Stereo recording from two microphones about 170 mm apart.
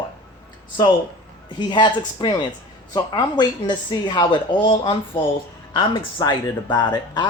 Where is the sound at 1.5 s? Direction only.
25° left (ahead or behind).